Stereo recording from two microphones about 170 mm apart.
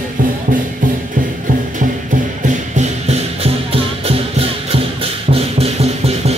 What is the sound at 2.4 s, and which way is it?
Music, 45° right (ahead or behind).